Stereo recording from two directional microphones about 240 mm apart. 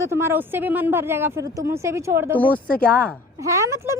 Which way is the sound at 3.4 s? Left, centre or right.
Centre.